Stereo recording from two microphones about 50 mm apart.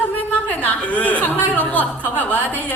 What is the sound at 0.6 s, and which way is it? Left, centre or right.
A man's voice, left.